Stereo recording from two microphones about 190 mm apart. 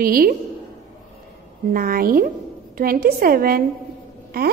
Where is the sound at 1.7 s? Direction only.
50° right (ahead or behind).